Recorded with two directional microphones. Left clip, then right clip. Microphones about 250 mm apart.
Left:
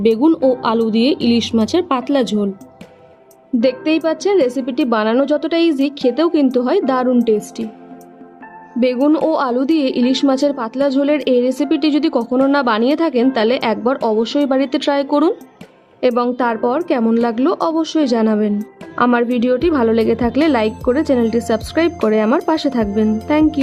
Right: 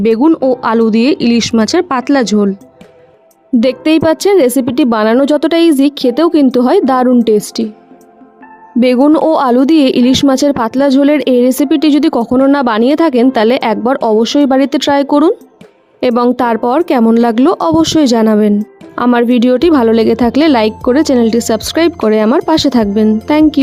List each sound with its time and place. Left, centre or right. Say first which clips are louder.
0.5 s a woman's voice: right 5 dB; right
1.1 s speech: right 4 dB; right
1.4 s a woman's voice: right 5 dB; right
3.6 s a woman's voice: right 5 dB; right
8.8 s a woman's voice: right 6 dB; right